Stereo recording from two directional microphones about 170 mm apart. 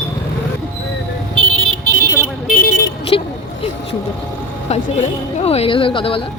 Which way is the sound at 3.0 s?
35° left (ahead or behind).